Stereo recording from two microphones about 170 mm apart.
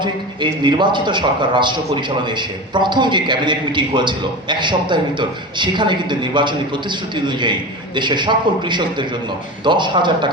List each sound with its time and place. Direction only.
0.0 s a man's voice: 25° right (ahead or behind)